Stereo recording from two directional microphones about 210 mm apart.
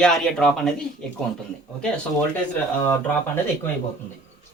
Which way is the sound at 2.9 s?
10° left (ahead or behind).